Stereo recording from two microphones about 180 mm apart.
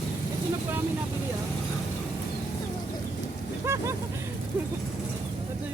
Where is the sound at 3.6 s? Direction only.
15° right (ahead or behind).